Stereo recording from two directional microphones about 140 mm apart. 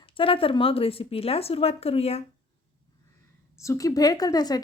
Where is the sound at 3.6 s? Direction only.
25° left (ahead or behind).